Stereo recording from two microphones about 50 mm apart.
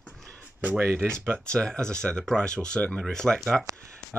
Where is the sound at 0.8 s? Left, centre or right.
Right.